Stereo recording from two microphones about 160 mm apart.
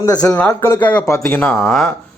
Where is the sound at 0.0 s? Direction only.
20° left (ahead or behind).